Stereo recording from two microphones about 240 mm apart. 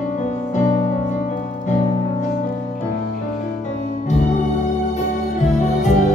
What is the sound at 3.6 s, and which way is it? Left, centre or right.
Music, left.